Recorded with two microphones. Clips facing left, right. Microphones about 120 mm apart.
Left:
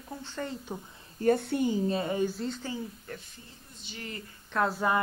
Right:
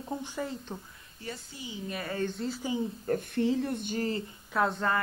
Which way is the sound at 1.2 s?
55° left (ahead or behind).